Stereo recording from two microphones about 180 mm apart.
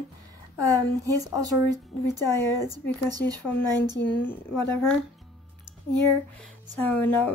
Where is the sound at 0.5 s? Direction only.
20° right (ahead or behind).